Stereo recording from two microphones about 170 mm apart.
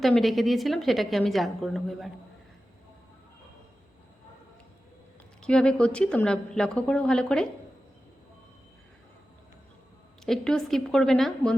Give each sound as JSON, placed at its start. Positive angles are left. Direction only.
{"t": 0.0, "sound": "a woman's voice", "side_deg": 0}
{"t": 5.4, "sound": "a woman's voice", "side_deg": 5}
{"t": 10.2, "sound": "a woman's voice", "side_deg": 5}